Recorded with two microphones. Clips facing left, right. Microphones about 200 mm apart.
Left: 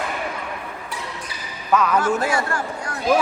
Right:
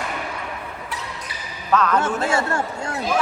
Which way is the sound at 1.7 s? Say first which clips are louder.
Even; 10° left (ahead or behind).